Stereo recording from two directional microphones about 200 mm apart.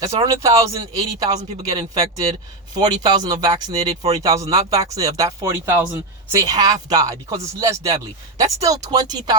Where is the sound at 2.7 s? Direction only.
20° right (ahead or behind).